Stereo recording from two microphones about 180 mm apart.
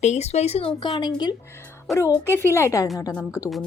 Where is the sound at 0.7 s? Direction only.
25° left (ahead or behind).